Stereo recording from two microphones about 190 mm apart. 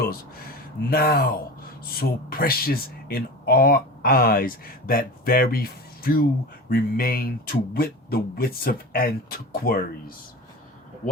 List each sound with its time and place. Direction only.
0.9 s speech: 50° left (ahead or behind)